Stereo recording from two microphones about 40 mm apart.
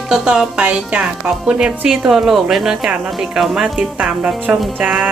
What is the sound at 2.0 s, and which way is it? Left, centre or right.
Speech, centre.